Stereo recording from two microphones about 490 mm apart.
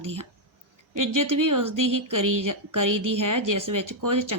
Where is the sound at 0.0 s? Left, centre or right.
Right.